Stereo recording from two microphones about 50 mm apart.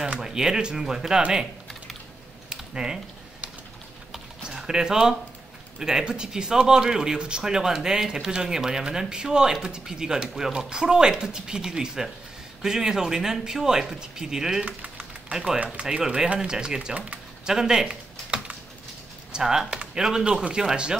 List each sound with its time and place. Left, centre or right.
0.2 s speech: centre
2.5 s typing: centre
4.1 s typing: centre
5.8 s speech: centre
17.5 s computer keyboard: centre
19.3 s speech: centre
19.7 s a sound: right
20.0 s speech: centre